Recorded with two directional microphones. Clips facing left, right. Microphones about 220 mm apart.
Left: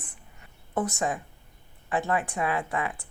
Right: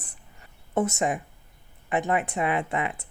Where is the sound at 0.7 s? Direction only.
25° right (ahead or behind).